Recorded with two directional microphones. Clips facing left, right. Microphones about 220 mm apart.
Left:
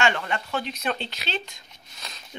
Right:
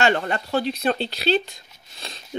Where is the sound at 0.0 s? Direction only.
40° right (ahead or behind).